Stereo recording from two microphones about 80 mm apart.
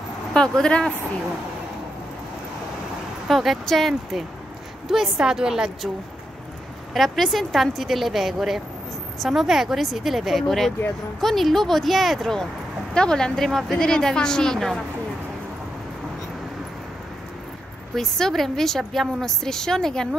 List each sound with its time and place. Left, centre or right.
0.3 s a woman's voice: centre
3.3 s a woman's voice: centre
6.9 s a woman's voice: centre
17.9 s a woman's voice: centre